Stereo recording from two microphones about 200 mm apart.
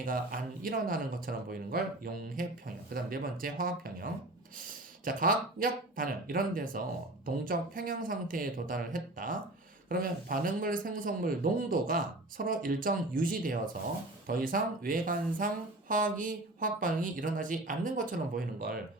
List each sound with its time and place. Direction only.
0.0 s speech: 45° right (ahead or behind)